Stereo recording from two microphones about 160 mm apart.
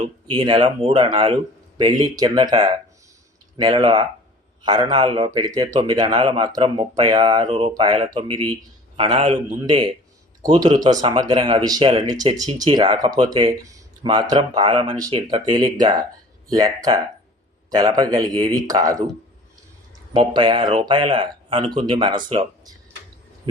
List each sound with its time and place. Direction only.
0.3 s speech: 30° right (ahead or behind)
7.4 s speech: 40° right (ahead or behind)
7.7 s speech: 25° right (ahead or behind)
9.1 s speech: 40° right (ahead or behind)
9.6 s speech: 30° right (ahead or behind)
20.1 s speech: 30° right (ahead or behind)